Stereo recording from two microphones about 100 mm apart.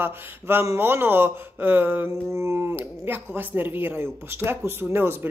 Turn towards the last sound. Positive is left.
turn(degrees=-20)  # may be behind; listen again after turning